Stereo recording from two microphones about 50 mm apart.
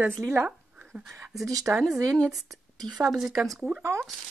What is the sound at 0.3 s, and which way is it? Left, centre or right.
Speech, right.